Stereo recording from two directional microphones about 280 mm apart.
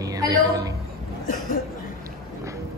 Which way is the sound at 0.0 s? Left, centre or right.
Centre.